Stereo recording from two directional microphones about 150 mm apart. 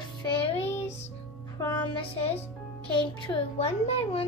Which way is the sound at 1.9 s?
40° left (ahead or behind).